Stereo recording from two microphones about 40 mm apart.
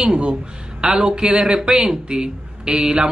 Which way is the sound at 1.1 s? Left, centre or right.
Centre.